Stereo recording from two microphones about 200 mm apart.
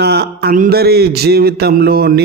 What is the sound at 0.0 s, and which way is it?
Mantra, 50° right (ahead or behind).